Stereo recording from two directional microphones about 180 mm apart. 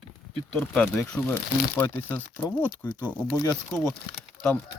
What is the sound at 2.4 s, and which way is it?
Speech, 20° left (ahead or behind).